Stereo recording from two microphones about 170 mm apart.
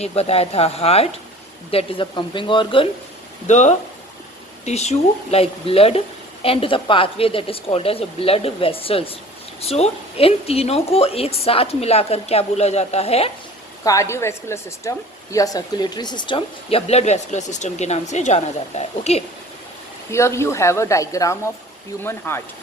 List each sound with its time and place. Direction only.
0.0 s a woman's voice: 35° left (ahead or behind)
3.4 s a woman's voice: 45° left (ahead or behind)
13.8 s a woman's voice: 15° left (ahead or behind); by 19.2 s 40° left (ahead or behind)
20.1 s a woman's voice: 15° left (ahead or behind)